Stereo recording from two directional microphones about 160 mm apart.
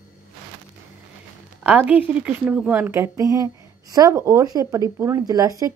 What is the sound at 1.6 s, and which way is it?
A woman's voice, 10° right (ahead or behind).